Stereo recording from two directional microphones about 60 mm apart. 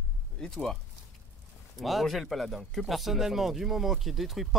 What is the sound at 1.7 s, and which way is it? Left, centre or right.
Speech, centre.